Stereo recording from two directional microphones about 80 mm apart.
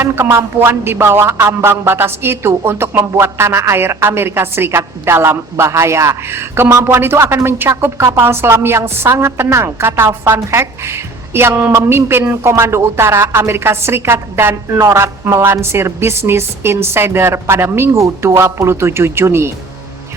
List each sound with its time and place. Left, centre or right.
0.0 s speech: right